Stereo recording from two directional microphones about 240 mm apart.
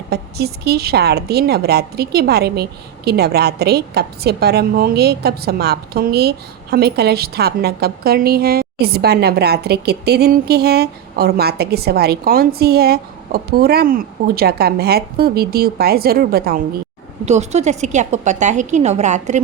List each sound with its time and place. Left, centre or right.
0.1 s a woman's voice: right
17.2 s a woman's voice: right